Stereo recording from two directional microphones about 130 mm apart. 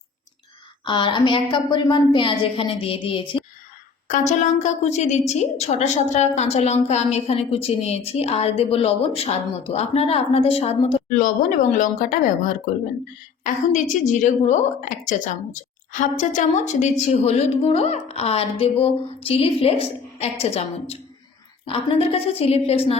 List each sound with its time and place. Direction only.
0.9 s a woman's voice: 40° left (ahead or behind)
4.1 s a woman's voice: 70° left (ahead or behind); by 10.9 s 50° left (ahead or behind)
11.2 s speech: 90° left
13.4 s a woman's voice: 70° left (ahead or behind); by 23.0 s 50° left (ahead or behind)